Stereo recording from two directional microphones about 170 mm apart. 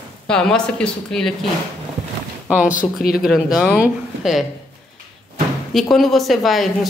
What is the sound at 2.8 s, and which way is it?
Speech, 60° left (ahead or behind).